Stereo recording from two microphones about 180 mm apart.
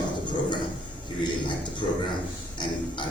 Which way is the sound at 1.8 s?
25° left (ahead or behind).